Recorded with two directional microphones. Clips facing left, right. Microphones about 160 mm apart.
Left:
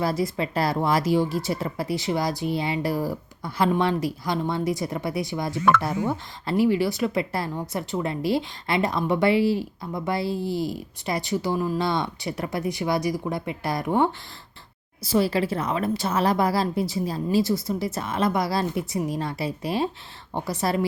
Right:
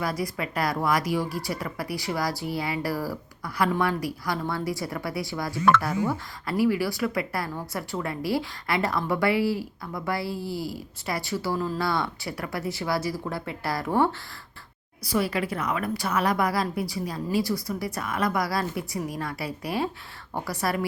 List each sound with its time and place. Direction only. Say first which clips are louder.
0.0 s a woman's voice: left 4 dB; 25° left (ahead or behind)
15.0 s a woman's voice: left 4 dB; 30° left (ahead or behind)